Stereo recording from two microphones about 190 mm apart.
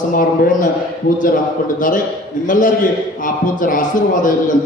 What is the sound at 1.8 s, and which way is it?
Speech, 45° left (ahead or behind).